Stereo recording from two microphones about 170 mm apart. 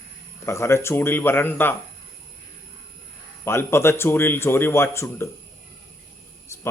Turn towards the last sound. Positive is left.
turn(degrees=15)  # may be behind; listen again after turning